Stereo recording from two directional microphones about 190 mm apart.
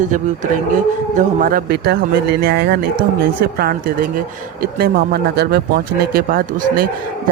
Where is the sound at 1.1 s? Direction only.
45° right (ahead or behind).